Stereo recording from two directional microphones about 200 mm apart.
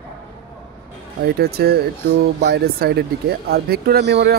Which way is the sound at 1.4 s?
50° right (ahead or behind).